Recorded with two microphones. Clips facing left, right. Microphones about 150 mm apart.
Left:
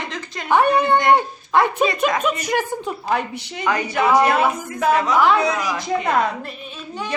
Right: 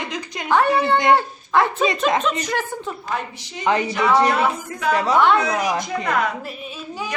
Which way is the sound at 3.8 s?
55° left (ahead or behind).